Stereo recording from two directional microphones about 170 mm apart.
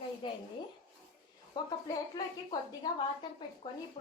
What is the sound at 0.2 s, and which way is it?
Speech, 30° left (ahead or behind).